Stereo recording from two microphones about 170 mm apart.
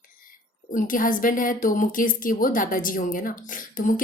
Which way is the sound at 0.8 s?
55° left (ahead or behind).